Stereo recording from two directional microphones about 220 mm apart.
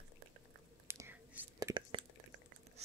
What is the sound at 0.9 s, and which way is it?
Whispering, 10° right (ahead or behind).